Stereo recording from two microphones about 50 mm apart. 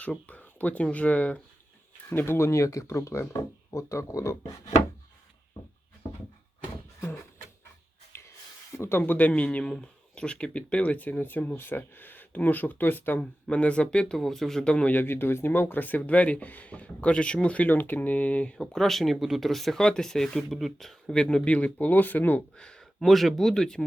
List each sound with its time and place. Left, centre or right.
0.3 s speech: left
2.0 s speech: left
8.1 s a sound: left
8.8 s speech: left
9.1 s a man's voice: left
13.1 s speech: left; by 14.6 s centre
14.6 s a man's voice: left
14.8 s speech: left
17.7 s speech: left
18.5 s speech: centre
21.1 s speech: centre; by 22.4 s left
22.5 s a sound: centre
23.0 s speech: centre